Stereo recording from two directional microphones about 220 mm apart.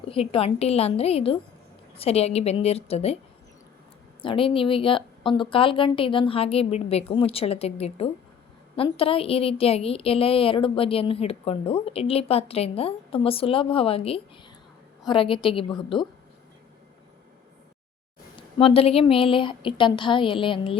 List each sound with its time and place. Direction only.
0.1 s a woman's voice: 25° left (ahead or behind)
4.2 s a woman's voice: 25° left (ahead or behind)
18.3 s a woman's voice: 25° left (ahead or behind)